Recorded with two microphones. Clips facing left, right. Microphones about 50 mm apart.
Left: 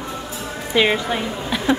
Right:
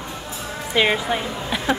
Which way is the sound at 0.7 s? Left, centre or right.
Centre.